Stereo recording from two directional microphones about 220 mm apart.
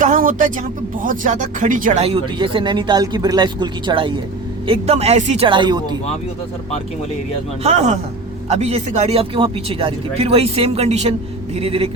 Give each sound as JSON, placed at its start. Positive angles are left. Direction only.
{"t": 0.0, "sound": "speech", "side_deg": -35}
{"t": 7.6, "sound": "speech", "side_deg": -30}